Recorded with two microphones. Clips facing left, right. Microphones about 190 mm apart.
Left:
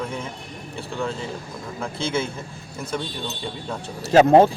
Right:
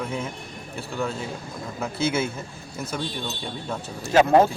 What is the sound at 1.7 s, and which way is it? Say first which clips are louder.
Speech: right 1 dB; 5° right (ahead or behind).